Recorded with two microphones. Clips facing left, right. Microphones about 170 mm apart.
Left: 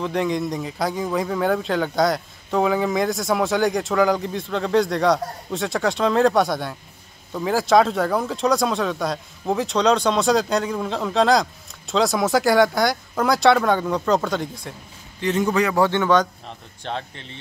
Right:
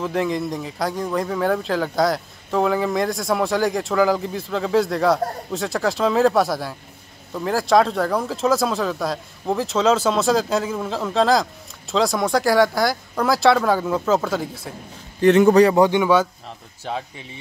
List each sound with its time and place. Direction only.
0.0 s speech: centre (ahead or behind)
15.2 s a man's voice: 60° right (ahead or behind)
15.7 s speech: 15° right (ahead or behind)